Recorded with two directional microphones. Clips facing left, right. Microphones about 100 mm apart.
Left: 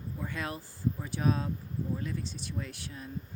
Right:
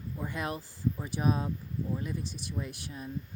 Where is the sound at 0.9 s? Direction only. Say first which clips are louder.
Right 1 dB; 15° right (ahead or behind).